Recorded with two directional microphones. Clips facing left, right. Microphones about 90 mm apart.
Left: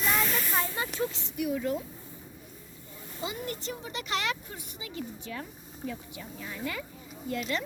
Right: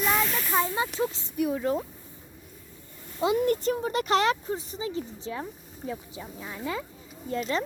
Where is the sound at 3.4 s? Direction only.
45° right (ahead or behind); by 6.8 s 25° right (ahead or behind).